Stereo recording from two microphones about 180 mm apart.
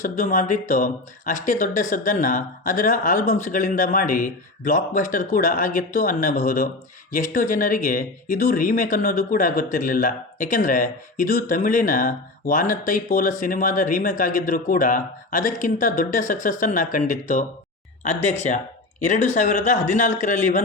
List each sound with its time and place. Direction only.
0.0 s speech: 45° left (ahead or behind)